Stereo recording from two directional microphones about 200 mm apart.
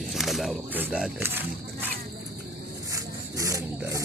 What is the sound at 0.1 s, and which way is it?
Speech, centre (ahead or behind).